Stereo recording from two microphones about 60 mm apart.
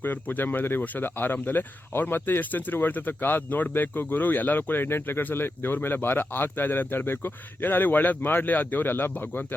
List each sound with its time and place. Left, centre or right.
0.0 s speech: left